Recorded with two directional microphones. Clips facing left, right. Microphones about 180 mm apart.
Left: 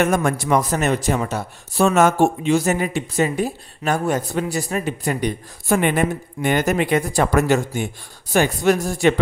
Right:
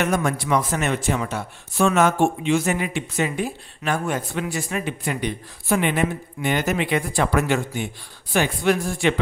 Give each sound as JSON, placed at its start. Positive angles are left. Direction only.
{"t": 0.0, "sound": "speech", "side_deg": 50}